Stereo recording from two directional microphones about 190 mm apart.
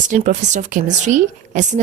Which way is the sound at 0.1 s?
40° right (ahead or behind).